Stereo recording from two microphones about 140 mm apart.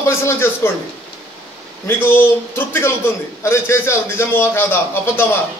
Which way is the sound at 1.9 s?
15° left (ahead or behind).